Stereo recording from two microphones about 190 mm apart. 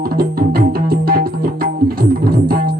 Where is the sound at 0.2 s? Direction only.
50° right (ahead or behind).